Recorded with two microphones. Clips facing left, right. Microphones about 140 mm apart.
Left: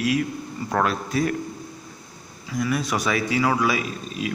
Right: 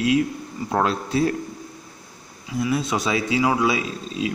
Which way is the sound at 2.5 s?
25° right (ahead or behind).